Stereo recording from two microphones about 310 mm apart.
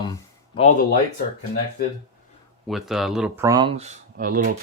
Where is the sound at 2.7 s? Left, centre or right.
Centre; by 4.6 s right.